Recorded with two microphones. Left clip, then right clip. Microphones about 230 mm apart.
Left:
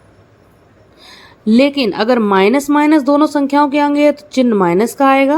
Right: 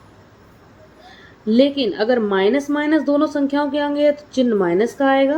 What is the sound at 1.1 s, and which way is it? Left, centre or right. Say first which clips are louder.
Speech: left 3 dB; left.